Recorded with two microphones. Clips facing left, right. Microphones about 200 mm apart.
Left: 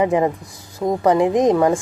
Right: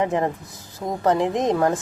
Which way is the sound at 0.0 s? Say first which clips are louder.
Left 5 dB; 5° left (ahead or behind).